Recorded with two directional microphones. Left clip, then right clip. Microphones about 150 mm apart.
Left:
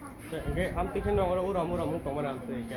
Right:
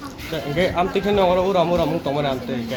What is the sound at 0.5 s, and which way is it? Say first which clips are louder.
Speech: right 12 dB; 90° right.